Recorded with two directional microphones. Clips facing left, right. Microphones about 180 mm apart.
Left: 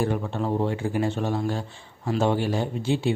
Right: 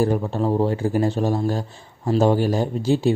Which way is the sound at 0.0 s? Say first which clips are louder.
Right 5 dB; 35° right (ahead or behind).